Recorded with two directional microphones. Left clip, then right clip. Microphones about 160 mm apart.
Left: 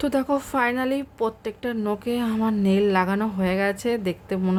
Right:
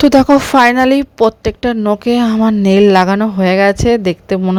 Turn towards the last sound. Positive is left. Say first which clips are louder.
# right 13 dB
turn(degrees=-50)  # may be behind; listen again after turning